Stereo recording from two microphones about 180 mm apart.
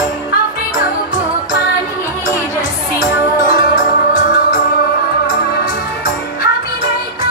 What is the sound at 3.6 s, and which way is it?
Music, 50° left (ahead or behind).